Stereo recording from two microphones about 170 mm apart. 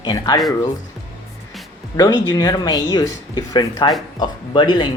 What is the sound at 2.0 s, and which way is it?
Speech, 25° left (ahead or behind).